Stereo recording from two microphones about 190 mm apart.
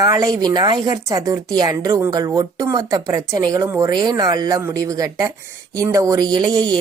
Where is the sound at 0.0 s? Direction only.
20° right (ahead or behind).